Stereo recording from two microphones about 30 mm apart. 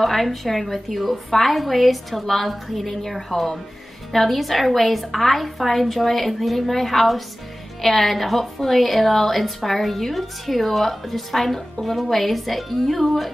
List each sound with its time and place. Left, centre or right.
0.0 s a woman's voice: centre